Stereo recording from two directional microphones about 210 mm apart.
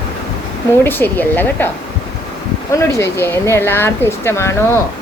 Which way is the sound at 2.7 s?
15° left (ahead or behind).